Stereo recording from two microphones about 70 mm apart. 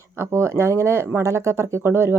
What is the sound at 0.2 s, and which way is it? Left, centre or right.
Speech, right.